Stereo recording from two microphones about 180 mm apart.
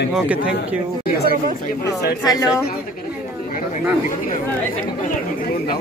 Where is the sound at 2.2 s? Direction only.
20° left (ahead or behind).